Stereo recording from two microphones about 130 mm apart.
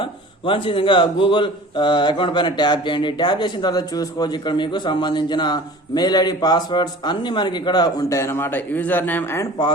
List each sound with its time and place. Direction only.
0.0 s a man's voice: 40° left (ahead or behind); by 9.5 s 15° left (ahead or behind)